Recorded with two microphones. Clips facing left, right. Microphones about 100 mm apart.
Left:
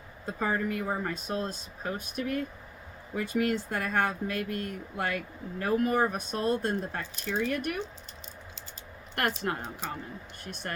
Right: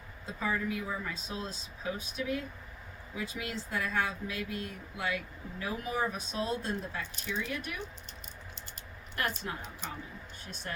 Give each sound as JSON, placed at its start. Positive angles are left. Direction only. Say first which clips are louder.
{"t": 0.3, "sound": "speech", "louder": "left 4 dB", "side_deg": 55}
{"t": 9.1, "sound": "speech", "louder": "left 5 dB", "side_deg": 60}